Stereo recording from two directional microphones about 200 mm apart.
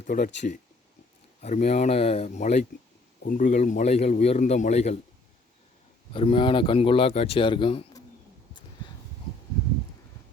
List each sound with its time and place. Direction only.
0.0 s speech: 45° left (ahead or behind)
1.4 s a man's voice: 35° left (ahead or behind)
6.1 s speech: 25° left (ahead or behind)